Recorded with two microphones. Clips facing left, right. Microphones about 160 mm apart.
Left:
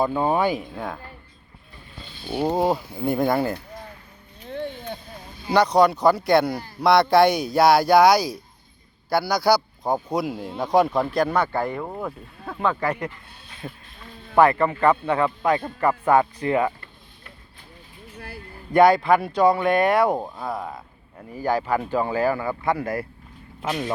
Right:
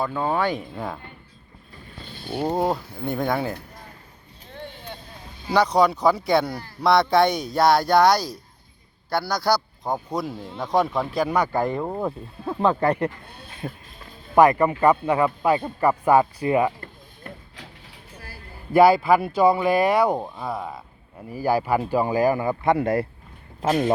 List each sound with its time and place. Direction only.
0.0 s speech: 20° left (ahead or behind)
0.5 s speech: centre (ahead or behind)
2.2 s speech: 10° left (ahead or behind)
5.5 s speech: centre (ahead or behind)
6.5 s speech: 15° left (ahead or behind)
6.8 s speech: centre (ahead or behind); by 13.8 s 30° right (ahead or behind)
14.3 s speech: 15° right (ahead or behind)
18.7 s speech: 5° right (ahead or behind); by 23.0 s 25° right (ahead or behind)
23.6 s speech: 45° right (ahead or behind)